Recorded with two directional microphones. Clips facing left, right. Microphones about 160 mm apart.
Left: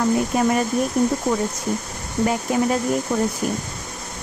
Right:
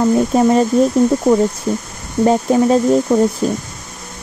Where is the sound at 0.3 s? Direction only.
30° right (ahead or behind).